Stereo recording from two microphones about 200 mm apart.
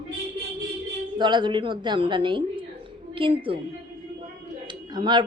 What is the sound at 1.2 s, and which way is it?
Speech, 25° right (ahead or behind).